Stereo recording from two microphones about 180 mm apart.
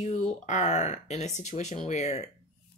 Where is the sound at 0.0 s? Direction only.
40° left (ahead or behind).